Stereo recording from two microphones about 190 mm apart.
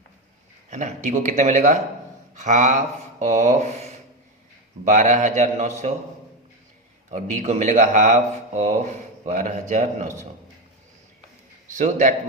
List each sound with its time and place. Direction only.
0.7 s speech: 40° right (ahead or behind)
7.1 s speech: 40° right (ahead or behind)
11.7 s speech: 40° right (ahead or behind)